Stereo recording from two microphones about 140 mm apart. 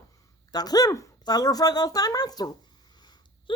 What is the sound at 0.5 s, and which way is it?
A woman's voice, 30° left (ahead or behind).